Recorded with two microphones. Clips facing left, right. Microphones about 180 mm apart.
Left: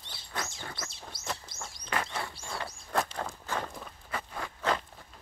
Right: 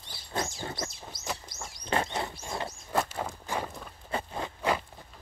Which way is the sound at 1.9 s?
25° right (ahead or behind).